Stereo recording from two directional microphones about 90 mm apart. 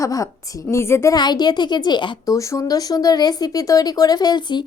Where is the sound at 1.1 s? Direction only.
50° left (ahead or behind).